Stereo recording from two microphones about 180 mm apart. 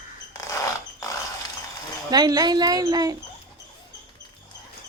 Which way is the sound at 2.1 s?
20° right (ahead or behind).